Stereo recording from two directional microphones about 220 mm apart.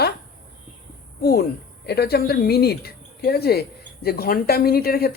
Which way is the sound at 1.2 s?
45° left (ahead or behind).